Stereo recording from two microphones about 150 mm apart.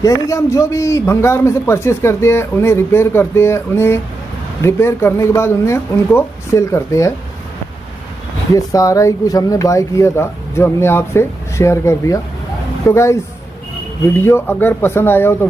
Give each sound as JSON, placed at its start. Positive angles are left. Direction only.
{"t": 0.0, "sound": "a man's voice", "side_deg": 20}
{"t": 8.5, "sound": "a man's voice", "side_deg": 20}